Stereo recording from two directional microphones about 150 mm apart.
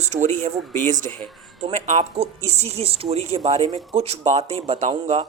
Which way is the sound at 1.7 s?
50° right (ahead or behind).